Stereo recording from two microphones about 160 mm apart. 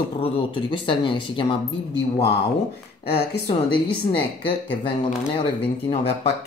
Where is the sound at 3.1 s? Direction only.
85° left.